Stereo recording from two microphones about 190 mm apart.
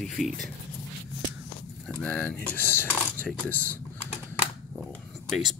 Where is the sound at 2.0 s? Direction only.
10° left (ahead or behind).